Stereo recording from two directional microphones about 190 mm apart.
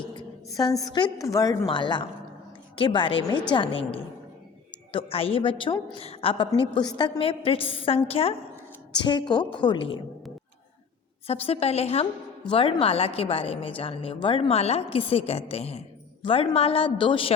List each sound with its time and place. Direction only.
0.1 s a woman's voice: 20° left (ahead or behind)
11.3 s a woman's voice: 30° left (ahead or behind)